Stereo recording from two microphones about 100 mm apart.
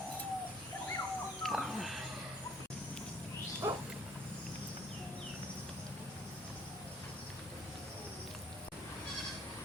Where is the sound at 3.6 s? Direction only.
25° right (ahead or behind).